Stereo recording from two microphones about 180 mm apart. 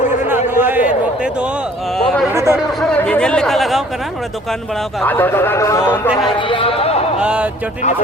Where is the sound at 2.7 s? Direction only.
5° left (ahead or behind).